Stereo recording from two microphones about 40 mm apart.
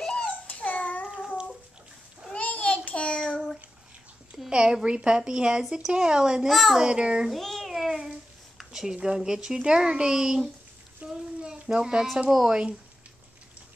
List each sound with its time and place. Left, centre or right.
0.0 s babbling: centre
0.6 s babbling: left
2.3 s child singing: left
4.5 s a woman's voice: right
6.4 s a child's voice: centre
6.8 s speech: right
7.2 s babbling: centre
8.5 s a sound: centre
8.9 s speech: centre
11.0 s a sound: right
11.6 s speech: centre
12.3 s speech: centre